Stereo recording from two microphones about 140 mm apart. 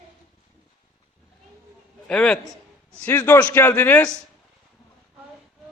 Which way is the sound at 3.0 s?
15° left (ahead or behind).